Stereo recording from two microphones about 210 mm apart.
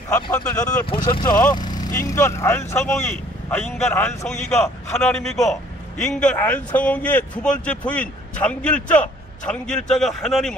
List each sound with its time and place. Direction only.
0.1 s speech: 15° left (ahead or behind)
1.5 s vehicle: 20° left (ahead or behind)
2.0 s a man's voice: 15° left (ahead or behind)